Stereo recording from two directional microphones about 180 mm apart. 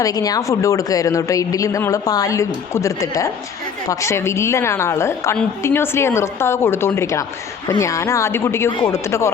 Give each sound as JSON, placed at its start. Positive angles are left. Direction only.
{"t": 0.0, "sound": "a woman's voice", "side_deg": 20}